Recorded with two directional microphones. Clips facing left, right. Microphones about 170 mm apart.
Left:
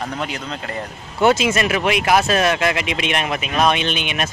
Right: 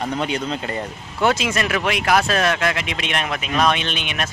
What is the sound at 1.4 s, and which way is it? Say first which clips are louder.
Speech: left 3 dB; 5° left (ahead or behind).